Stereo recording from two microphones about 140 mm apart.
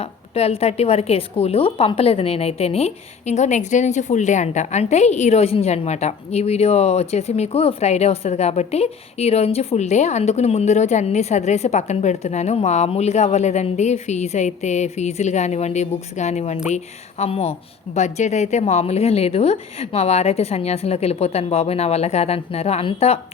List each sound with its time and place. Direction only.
0.0 s a woman's voice: 45° left (ahead or behind)